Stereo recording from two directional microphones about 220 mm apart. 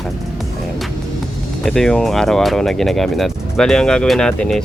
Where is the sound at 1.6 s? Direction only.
5° left (ahead or behind).